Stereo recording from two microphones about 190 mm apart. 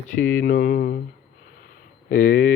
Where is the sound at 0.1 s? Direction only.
45° left (ahead or behind).